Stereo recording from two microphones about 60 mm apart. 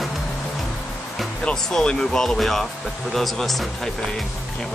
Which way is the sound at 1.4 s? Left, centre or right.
Centre.